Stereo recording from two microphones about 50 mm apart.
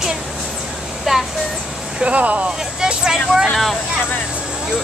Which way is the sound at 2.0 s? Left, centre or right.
Right.